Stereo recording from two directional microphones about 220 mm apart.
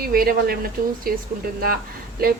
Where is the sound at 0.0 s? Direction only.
40° right (ahead or behind).